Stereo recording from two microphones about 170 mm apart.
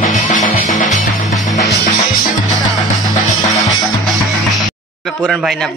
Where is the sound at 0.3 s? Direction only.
50° left (ahead or behind).